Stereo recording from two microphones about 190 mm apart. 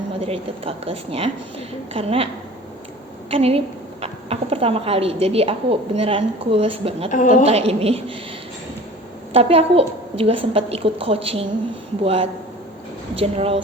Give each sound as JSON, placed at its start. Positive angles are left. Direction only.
{"t": 0.2, "sound": "a woman's voice", "side_deg": -30}
{"t": 7.1, "sound": "a woman's voice", "side_deg": 40}
{"t": 7.4, "sound": "a woman's voice", "side_deg": -30}
{"t": 9.3, "sound": "a woman's voice", "side_deg": -30}